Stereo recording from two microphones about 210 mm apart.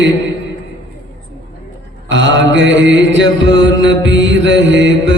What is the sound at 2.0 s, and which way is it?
Mantra, 60° right (ahead or behind).